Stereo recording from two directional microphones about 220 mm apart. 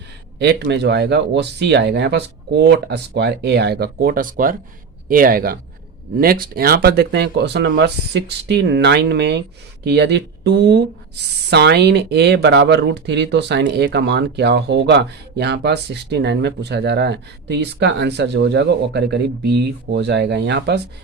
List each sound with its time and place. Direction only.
0.3 s speech: 50° right (ahead or behind)